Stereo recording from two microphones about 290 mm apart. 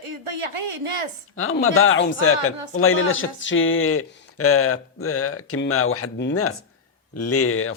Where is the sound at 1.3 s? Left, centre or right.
Left.